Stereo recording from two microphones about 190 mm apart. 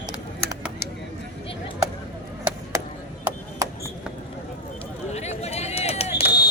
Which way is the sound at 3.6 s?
20° right (ahead or behind).